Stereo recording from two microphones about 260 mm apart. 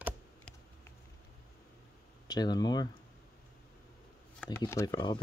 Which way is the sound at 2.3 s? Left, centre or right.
Centre.